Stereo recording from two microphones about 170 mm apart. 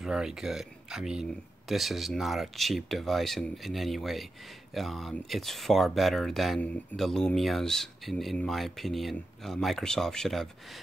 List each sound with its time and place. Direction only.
0.0 s speech: 5° right (ahead or behind)